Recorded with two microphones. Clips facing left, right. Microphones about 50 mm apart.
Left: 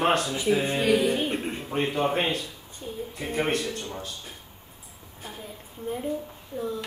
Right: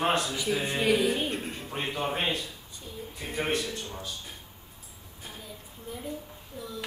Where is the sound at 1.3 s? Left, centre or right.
Left.